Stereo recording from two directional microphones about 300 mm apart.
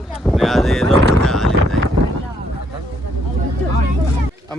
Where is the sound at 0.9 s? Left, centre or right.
Centre.